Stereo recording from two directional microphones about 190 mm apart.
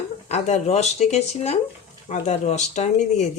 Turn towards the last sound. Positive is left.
turn(degrees=40)  # may be behind; listen again after turning